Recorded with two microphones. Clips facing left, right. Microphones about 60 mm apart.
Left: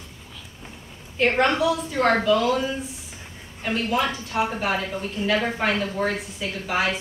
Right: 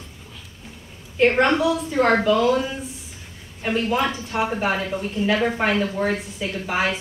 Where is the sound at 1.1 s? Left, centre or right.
Centre.